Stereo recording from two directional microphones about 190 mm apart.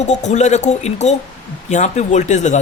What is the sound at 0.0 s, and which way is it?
A woman's voice, 35° left (ahead or behind).